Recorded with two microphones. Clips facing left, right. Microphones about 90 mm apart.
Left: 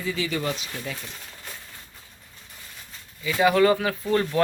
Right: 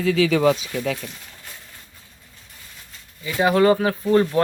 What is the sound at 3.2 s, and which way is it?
Speech, 25° right (ahead or behind).